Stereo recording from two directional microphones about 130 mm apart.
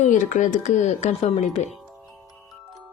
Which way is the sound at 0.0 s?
75° left (ahead or behind).